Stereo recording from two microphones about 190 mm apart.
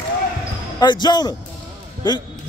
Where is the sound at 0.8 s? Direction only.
20° left (ahead or behind).